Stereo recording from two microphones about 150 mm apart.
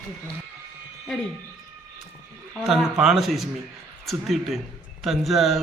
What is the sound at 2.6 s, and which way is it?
Mantra, centre (ahead or behind).